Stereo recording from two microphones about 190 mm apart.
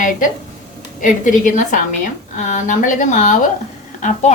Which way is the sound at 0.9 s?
45° left (ahead or behind).